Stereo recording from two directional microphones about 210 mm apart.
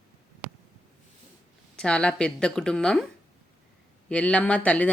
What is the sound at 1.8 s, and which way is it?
A woman's voice, 5° left (ahead or behind).